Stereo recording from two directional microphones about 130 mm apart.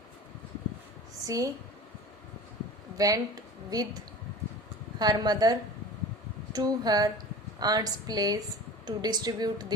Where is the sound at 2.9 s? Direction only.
25° right (ahead or behind).